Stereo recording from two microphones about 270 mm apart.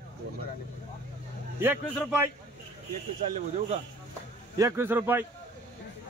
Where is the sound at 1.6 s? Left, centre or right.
Centre.